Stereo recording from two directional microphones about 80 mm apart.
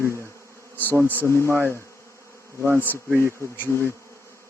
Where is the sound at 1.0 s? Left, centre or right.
Right.